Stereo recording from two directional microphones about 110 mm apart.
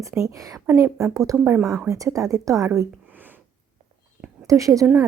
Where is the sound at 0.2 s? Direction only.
30° right (ahead or behind).